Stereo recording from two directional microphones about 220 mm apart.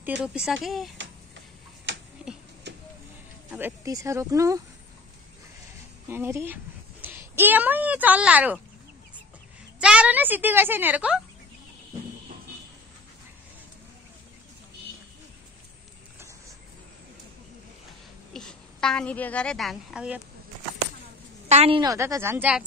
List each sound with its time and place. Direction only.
0.2 s speech: 5° right (ahead or behind)
2.7 s a sound: 50° right (ahead or behind)
3.5 s a woman's voice: 10° right (ahead or behind)
6.0 s a child's voice: 10° right (ahead or behind)
9.8 s a woman's voice: 5° right (ahead or behind)
18.3 s a woman's voice: 5° left (ahead or behind)
21.5 s a woman's voice: 25° right (ahead or behind); by 22.7 s 5° right (ahead or behind)